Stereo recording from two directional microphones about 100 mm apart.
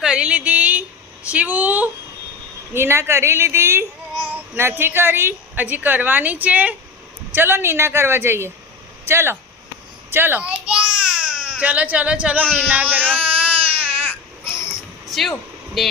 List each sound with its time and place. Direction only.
0.0 s a sound: 10° right (ahead or behind)
1.2 s speech: 15° right (ahead or behind)
2.7 s a child's voice: 25° right (ahead or behind)
10.1 s baby cry: 20° right (ahead or behind)
14.4 s insect: 25° left (ahead or behind)
14.7 s a sound: centre (ahead or behind)